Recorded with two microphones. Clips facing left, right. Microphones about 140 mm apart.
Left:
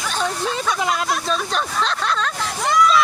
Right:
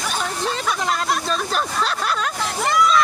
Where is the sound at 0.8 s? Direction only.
Centre (ahead or behind).